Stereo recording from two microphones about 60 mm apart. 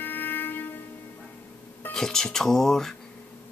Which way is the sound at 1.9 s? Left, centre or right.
Centre.